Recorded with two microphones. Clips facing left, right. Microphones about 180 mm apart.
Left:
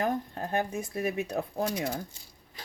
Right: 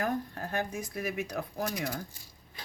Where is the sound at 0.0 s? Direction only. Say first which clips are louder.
Left 2 dB; 20° left (ahead or behind).